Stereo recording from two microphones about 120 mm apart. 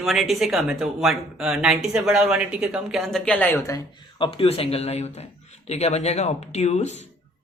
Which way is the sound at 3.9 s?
45° left (ahead or behind).